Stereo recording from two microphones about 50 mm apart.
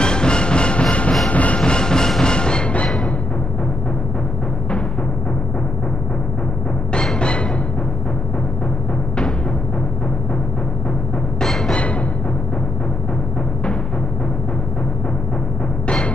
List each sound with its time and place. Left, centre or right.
0.0 s music: centre
1.6 s music: centre
7.2 s music: left
11.4 s timpani: centre